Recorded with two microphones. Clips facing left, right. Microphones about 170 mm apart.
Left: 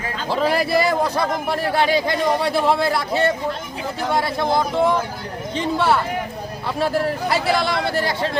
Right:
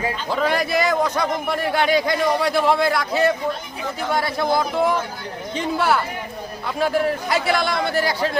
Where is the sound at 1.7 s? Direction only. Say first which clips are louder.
Even; 30° left (ahead or behind).